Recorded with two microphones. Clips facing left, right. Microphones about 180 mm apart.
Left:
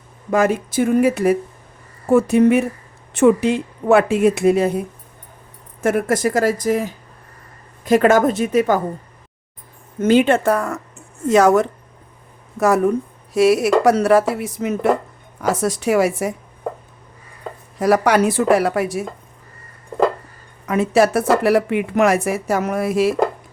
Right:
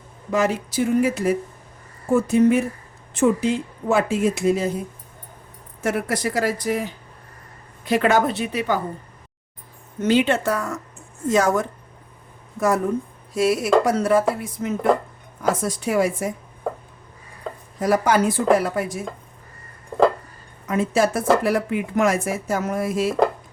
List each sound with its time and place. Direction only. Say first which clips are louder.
0.3 s speech: left 4 dB; 50° left (ahead or behind)
5.8 s speech: left 6 dB; 50° left (ahead or behind)
10.0 s speech: left 5 dB; 50° left (ahead or behind)
11.3 s speech: left 6 dB; 70° left (ahead or behind)
17.7 s speech: left 4 dB; 75° left (ahead or behind)
20.7 s speech: left 4 dB; 70° left (ahead or behind)